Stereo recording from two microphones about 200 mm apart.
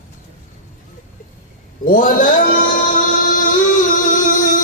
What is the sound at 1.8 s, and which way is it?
Music, 40° left (ahead or behind).